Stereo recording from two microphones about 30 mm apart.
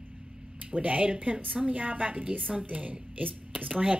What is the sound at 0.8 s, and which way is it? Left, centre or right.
A woman's voice, right.